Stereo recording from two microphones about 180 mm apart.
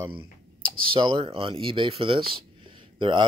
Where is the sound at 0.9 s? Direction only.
25° right (ahead or behind).